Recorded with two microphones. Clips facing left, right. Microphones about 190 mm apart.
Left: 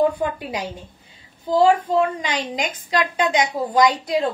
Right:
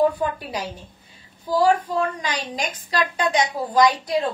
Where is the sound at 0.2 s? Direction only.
20° left (ahead or behind).